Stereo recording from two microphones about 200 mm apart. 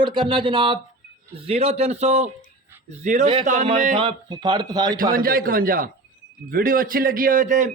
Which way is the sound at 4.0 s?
25° right (ahead or behind).